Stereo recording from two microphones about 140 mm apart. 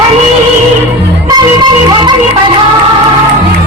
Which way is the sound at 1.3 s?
30° right (ahead or behind).